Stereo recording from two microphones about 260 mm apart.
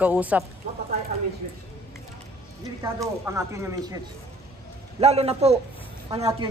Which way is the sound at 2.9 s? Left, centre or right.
Centre.